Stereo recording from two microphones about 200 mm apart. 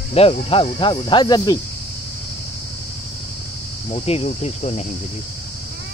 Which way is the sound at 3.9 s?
30° left (ahead or behind).